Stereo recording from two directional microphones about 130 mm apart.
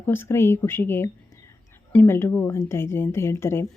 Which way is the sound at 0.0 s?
15° left (ahead or behind).